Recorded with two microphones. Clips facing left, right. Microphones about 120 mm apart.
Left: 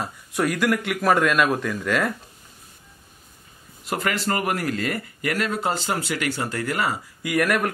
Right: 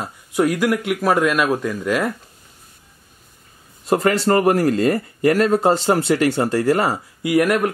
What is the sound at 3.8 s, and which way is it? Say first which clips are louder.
Speech: right 8 dB; 35° right (ahead or behind).